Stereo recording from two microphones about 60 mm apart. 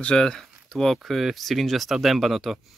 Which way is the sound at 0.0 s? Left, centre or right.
Centre.